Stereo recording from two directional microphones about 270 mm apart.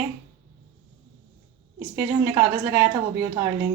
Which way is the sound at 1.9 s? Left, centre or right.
Centre.